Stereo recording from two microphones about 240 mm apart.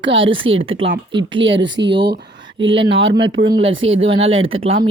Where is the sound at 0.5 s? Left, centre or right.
Right.